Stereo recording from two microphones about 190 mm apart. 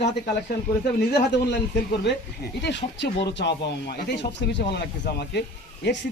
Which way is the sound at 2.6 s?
65° left (ahead or behind).